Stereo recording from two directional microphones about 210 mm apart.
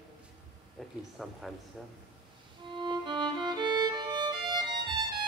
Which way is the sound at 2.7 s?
20° right (ahead or behind).